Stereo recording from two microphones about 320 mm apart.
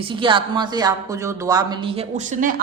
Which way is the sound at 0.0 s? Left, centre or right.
Centre.